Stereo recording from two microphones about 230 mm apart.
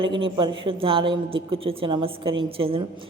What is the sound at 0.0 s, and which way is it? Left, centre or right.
Speech, right.